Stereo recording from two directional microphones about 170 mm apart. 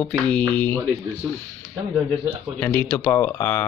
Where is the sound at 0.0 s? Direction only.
5° left (ahead or behind).